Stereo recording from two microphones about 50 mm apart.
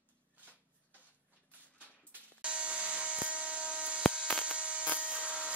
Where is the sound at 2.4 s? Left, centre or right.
Right.